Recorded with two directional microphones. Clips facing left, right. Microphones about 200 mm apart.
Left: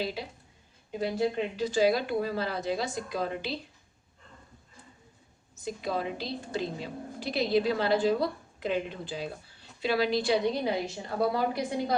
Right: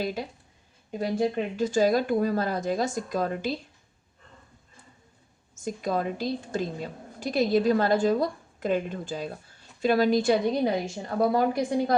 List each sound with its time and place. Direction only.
0.0 s a woman's voice: 45° right (ahead or behind)
5.5 s a woman's voice: 45° right (ahead or behind)